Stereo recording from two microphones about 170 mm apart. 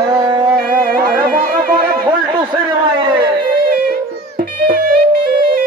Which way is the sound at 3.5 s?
60° right (ahead or behind).